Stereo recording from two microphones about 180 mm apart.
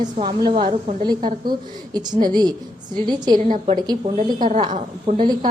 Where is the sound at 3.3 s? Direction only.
50° right (ahead or behind); by 5.2 s 35° right (ahead or behind).